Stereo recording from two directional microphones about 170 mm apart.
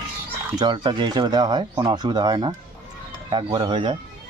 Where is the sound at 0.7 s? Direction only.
25° right (ahead or behind).